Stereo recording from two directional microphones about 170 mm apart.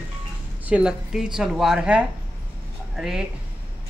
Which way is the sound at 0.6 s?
5° right (ahead or behind).